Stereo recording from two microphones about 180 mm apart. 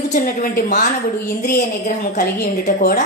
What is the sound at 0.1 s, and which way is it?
A woman's voice, 50° left (ahead or behind).